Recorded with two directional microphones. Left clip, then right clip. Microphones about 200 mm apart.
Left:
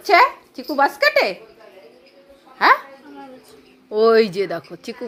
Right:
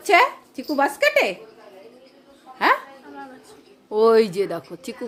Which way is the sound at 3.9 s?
5° right (ahead or behind).